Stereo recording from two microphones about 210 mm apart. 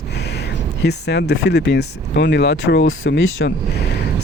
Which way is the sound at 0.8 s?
50° left (ahead or behind).